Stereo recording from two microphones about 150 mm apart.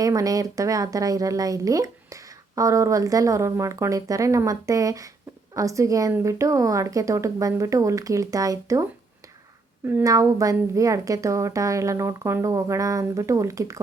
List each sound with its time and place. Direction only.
0.0 s speech: 25° right (ahead or behind)